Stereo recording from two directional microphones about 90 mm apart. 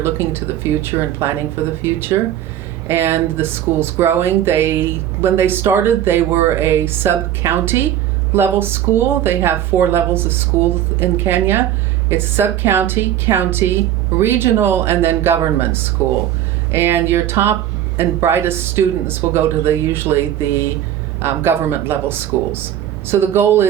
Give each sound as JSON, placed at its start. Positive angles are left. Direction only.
{"t": 0.0, "sound": "speech", "side_deg": -25}